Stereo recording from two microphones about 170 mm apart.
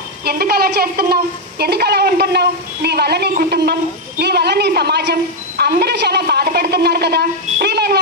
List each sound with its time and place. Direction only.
0.2 s a woman's voice: 65° right (ahead or behind)